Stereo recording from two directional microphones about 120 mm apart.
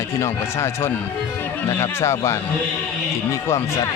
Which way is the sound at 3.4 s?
25° left (ahead or behind).